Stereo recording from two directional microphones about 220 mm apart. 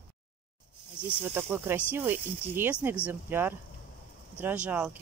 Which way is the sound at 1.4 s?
10° right (ahead or behind).